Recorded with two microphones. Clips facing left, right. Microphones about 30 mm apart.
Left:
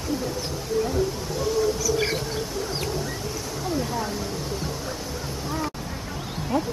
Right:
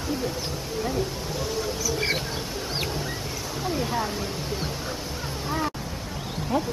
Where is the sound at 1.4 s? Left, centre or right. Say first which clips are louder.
Left 6 dB; centre.